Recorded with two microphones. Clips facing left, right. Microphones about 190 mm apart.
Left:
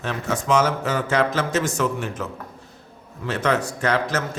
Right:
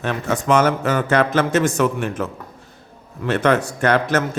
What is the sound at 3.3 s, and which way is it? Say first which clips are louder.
Speech: right 5 dB; 60° right (ahead or behind).